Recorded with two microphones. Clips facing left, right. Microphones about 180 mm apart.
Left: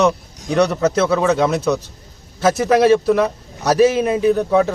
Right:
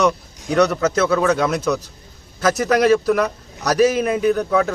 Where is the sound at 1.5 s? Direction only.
30° left (ahead or behind).